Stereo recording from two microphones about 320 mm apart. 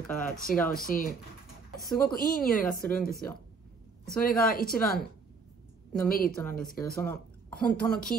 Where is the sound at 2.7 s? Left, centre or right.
Left.